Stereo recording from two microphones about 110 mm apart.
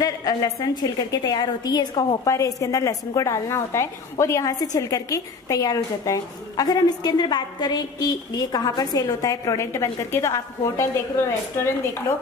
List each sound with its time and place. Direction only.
0.0 s a woman's voice: 35° left (ahead or behind)